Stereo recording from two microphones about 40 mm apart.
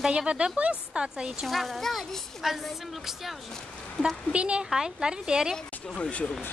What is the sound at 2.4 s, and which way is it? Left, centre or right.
Speech, centre.